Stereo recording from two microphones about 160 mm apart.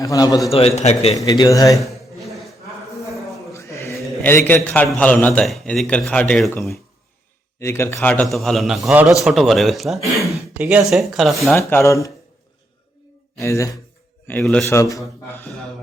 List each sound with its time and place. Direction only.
0.0 s a man's voice: 20° left (ahead or behind)
0.5 s a man's voice: 40° left (ahead or behind)
1.1 s a man's voice: 20° left (ahead or behind)
1.8 s a sound: centre (ahead or behind)
3.5 s a sound: 20° left (ahead or behind)
4.2 s a man's voice: 10° left (ahead or behind)
7.6 s a man's voice: 15° left (ahead or behind)
8.3 s a man's voice: centre (ahead or behind)
10.2 s a sound: 10° right (ahead or behind)
10.8 s a man's voice: centre (ahead or behind)
11.5 s a man's voice: 15° left (ahead or behind)
13.4 s a man's voice: 20° left (ahead or behind)
14.3 s a man's voice: 5° left (ahead or behind)
14.6 s a man's voice: 20° left (ahead or behind)